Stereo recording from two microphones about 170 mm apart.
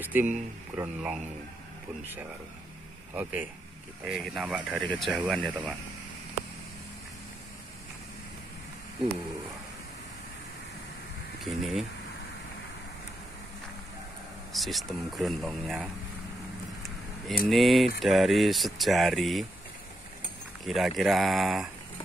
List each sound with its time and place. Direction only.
0.0 s speech: 10° right (ahead or behind)
3.2 s speech: 10° right (ahead or behind)
11.4 s speech: centre (ahead or behind)
14.5 s speech: centre (ahead or behind)
17.5 s speech: centre (ahead or behind)
20.6 s speech: centre (ahead or behind)